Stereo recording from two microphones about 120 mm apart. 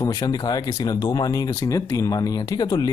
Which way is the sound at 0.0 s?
30° left (ahead or behind).